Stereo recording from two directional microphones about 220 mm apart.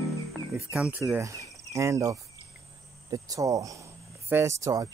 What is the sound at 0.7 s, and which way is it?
Speech, 5° right (ahead or behind).